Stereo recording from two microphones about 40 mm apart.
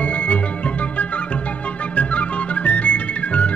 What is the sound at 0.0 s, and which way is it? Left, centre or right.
Music, left.